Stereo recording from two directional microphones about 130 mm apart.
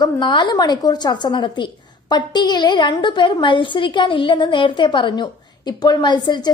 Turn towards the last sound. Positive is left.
turn(degrees=35)  # may be behind; listen again after turning